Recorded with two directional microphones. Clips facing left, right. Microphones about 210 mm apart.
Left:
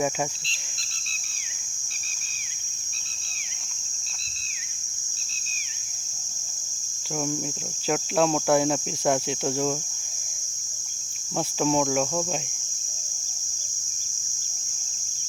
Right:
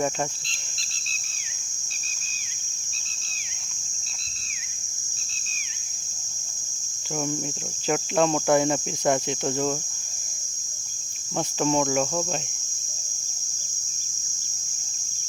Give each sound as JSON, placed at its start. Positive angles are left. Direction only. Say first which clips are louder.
{"t": 7.9, "sound": "cricket", "louder": "right 1 dB", "side_deg": 0}
{"t": 11.3, "sound": "cricket", "louder": "even", "side_deg": 0}